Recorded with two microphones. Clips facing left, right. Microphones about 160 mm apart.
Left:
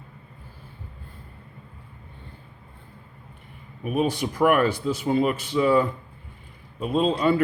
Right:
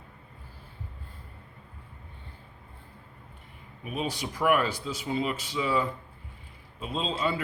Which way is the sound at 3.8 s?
55° left (ahead or behind).